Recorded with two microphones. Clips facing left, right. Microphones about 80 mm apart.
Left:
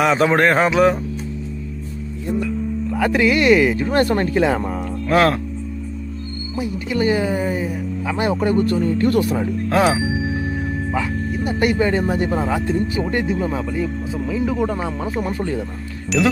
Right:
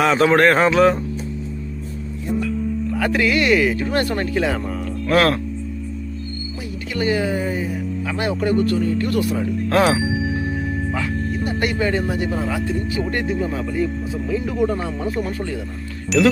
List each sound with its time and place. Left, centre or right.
0.0 s speech: centre
2.9 s speech: centre
6.9 s speech: left
9.4 s speech: centre
10.9 s speech: centre; by 13.1 s left
13.1 s speech: centre